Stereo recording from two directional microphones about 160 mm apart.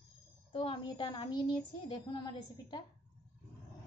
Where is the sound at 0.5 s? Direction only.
30° left (ahead or behind).